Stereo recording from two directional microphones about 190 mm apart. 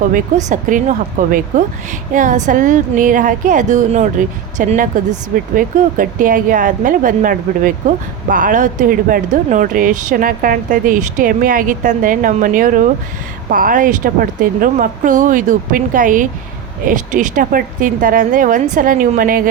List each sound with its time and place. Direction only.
0.4 s a woman's voice: 40° right (ahead or behind)